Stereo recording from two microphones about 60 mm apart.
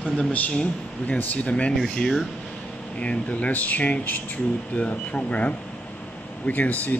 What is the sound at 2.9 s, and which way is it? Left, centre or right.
Speech, left.